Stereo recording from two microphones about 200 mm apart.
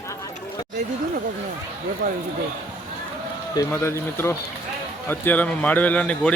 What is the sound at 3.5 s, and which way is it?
A man's voice, 15° left (ahead or behind).